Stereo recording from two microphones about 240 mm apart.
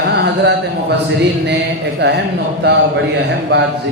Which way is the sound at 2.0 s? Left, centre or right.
Right.